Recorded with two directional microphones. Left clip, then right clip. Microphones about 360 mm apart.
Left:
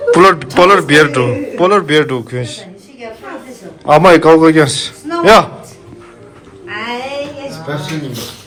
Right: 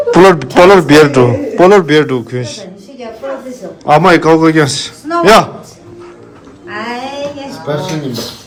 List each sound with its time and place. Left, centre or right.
0.1 s a man's voice: centre
3.8 s a man's voice: centre
7.5 s speech: right